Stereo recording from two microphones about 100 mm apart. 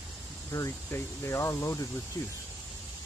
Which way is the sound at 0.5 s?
30° left (ahead or behind).